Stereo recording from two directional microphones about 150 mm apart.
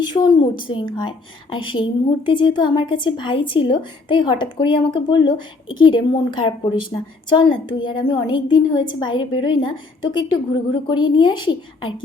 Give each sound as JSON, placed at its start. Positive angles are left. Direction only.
{"t": 0.1, "sound": "a woman's voice", "side_deg": 30}